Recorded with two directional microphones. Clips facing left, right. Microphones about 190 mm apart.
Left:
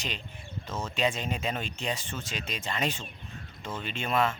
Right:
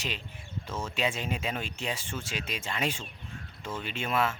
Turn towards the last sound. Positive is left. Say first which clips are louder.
# left 1 dB
turn(degrees=-5)  # may be behind; listen again after turning